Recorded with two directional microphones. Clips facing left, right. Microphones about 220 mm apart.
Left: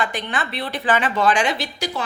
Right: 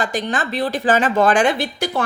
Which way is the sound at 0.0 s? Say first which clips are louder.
Right 3 dB; 40° right (ahead or behind).